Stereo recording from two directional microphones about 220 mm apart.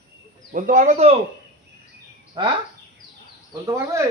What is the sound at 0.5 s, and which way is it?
Speech, 35° right (ahead or behind).